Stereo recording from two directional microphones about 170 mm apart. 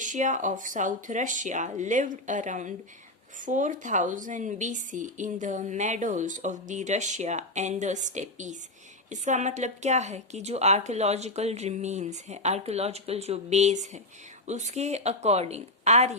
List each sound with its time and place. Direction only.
0.0 s a woman's voice: 50° right (ahead or behind)